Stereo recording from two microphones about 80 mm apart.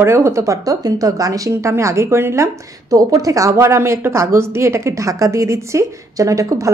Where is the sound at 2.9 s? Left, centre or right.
Right.